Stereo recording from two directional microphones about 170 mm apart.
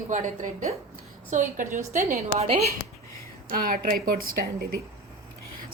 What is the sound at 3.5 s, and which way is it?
Speech, 55° right (ahead or behind).